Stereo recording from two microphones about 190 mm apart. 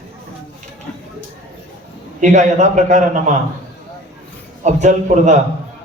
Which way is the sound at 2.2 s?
40° right (ahead or behind).